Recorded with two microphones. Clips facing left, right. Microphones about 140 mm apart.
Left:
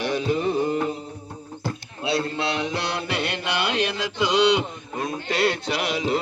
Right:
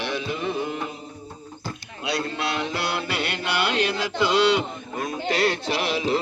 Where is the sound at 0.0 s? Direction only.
40° left (ahead or behind).